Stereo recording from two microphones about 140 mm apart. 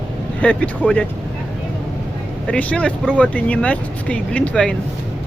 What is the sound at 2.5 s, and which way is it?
Speech, 10° left (ahead or behind).